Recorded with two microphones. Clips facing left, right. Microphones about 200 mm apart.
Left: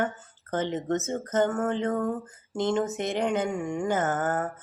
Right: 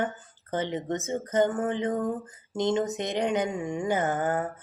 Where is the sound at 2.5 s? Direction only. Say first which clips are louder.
Even; 20° right (ahead or behind).